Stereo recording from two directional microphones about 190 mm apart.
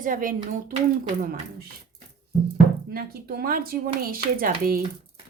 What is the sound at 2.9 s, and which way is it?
A woman's voice, 55° right (ahead or behind).